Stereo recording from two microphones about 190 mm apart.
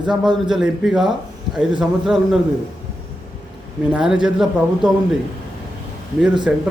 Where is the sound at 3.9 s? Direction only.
5° right (ahead or behind).